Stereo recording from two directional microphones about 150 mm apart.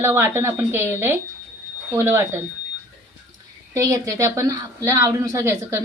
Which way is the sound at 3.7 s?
20° right (ahead or behind).